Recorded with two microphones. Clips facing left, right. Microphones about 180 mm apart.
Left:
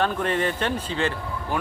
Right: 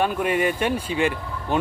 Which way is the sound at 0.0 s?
10° right (ahead or behind).